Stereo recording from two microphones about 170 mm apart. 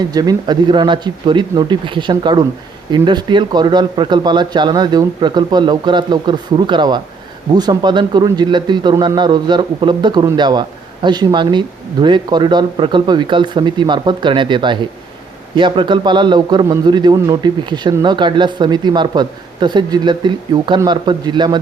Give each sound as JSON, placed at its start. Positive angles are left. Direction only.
{"t": 0.1, "sound": "a man's voice", "side_deg": -20}